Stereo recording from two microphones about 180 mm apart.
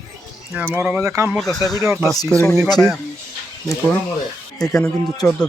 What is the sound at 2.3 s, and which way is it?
Speech, 10° left (ahead or behind).